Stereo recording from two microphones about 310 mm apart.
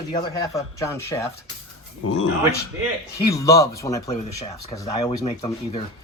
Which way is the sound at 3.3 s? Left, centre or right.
Centre.